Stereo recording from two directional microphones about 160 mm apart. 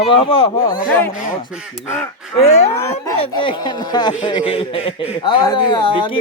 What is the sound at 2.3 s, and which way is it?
Speech, 40° left (ahead or behind).